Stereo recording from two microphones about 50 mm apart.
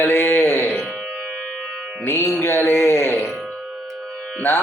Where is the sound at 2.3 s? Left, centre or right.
Left.